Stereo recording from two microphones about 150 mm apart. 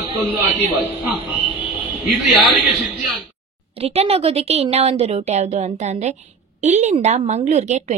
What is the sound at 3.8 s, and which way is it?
A woman's voice, 40° right (ahead or behind).